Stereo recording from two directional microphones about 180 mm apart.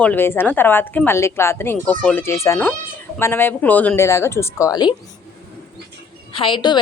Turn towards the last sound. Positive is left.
turn(degrees=25)  # may be behind; listen again after turning